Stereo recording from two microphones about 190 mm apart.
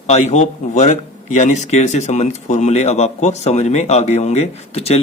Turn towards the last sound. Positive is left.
turn(degrees=30)  # may be behind; listen again after turning